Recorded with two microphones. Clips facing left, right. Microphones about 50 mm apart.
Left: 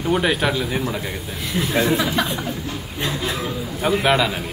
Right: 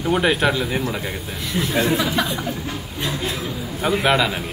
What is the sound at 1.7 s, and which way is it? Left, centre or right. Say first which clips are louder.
Speech: left 1 dB; left.